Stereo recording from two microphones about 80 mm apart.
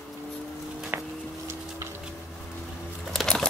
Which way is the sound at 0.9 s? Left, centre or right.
Right.